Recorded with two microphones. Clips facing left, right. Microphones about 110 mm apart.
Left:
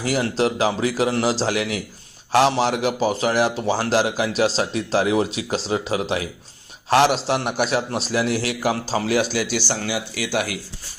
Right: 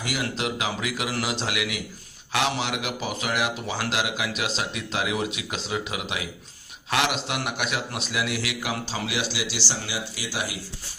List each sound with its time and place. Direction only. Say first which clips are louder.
0.0 s a man's voice: left 8 dB; 35° left (ahead or behind); by 10.6 s 65° left (ahead or behind)